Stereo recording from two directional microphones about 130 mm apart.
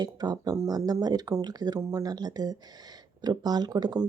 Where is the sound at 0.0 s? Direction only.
30° right (ahead or behind).